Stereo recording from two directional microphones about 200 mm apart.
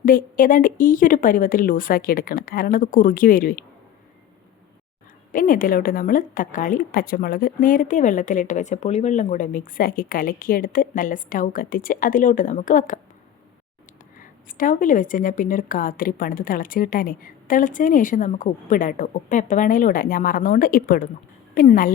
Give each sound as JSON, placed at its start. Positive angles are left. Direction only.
{"t": 0.0, "sound": "a woman's voice", "side_deg": 45}
{"t": 5.3, "sound": "a woman's voice", "side_deg": 45}
{"t": 14.2, "sound": "a woman's voice", "side_deg": 40}